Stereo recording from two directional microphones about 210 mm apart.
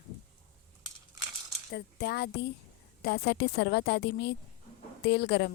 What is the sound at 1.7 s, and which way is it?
Speech, 50° left (ahead or behind).